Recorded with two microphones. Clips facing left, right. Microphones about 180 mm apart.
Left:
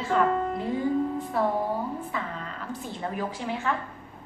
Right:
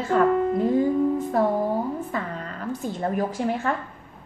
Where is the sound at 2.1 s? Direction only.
45° right (ahead or behind).